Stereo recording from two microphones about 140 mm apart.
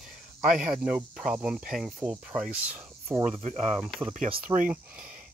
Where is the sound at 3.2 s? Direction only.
50° right (ahead or behind).